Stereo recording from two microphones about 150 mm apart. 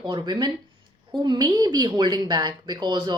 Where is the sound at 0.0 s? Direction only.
30° right (ahead or behind).